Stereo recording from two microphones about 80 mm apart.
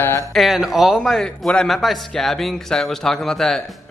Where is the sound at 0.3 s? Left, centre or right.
Centre.